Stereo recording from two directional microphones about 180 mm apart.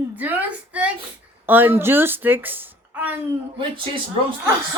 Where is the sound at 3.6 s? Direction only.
30° right (ahead or behind).